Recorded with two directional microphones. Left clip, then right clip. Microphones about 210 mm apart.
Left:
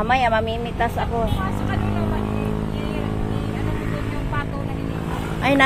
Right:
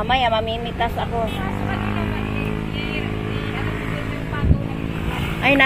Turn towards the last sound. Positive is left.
turn(degrees=-25)  # may be behind; listen again after turning